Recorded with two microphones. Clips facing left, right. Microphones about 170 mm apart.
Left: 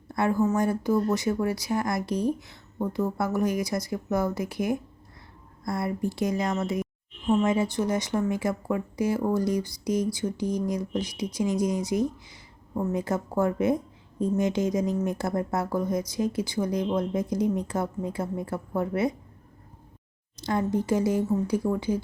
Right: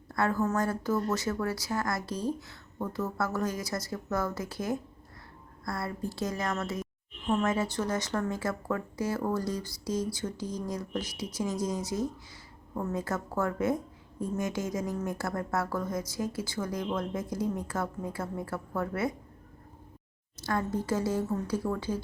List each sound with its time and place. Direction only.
0.1 s a woman's voice: 15° left (ahead or behind)
20.4 s speech: 20° left (ahead or behind)